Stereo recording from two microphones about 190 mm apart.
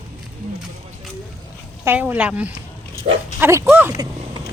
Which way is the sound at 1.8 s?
10° right (ahead or behind).